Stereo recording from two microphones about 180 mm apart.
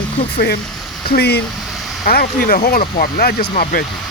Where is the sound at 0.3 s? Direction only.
60° left (ahead or behind).